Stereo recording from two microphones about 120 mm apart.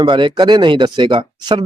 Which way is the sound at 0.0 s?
40° right (ahead or behind).